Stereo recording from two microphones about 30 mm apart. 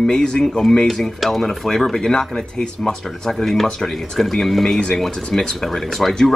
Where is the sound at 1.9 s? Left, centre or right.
Left.